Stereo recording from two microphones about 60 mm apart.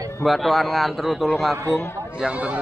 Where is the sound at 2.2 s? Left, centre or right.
Centre.